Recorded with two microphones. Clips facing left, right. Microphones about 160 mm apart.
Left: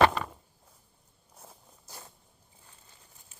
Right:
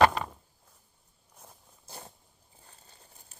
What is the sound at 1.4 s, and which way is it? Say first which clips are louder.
Walk: left 2 dB; 5° left (ahead or behind).